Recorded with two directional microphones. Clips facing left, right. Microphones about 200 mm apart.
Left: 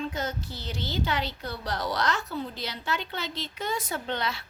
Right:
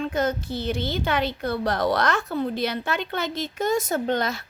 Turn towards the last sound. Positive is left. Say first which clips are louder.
# right 7 dB
turn(degrees=-45)  # may be behind; listen again after turning